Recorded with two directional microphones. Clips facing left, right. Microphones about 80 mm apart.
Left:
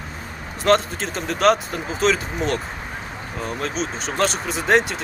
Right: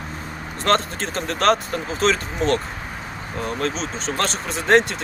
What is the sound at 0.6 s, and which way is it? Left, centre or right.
Speech, centre.